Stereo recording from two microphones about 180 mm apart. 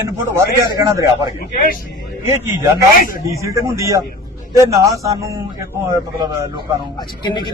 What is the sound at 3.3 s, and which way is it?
A man's voice, 15° right (ahead or behind).